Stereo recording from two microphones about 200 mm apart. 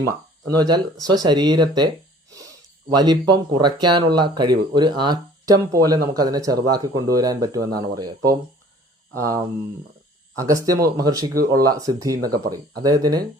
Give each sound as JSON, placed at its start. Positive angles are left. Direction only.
{"t": 0.4, "sound": "speech", "side_deg": -20}
{"t": 2.9, "sound": "speech", "side_deg": -20}